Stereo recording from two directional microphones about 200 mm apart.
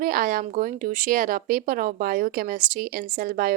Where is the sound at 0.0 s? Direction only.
45° right (ahead or behind).